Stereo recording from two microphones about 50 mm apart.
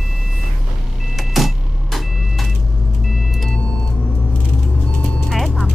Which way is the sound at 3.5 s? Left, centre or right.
Left.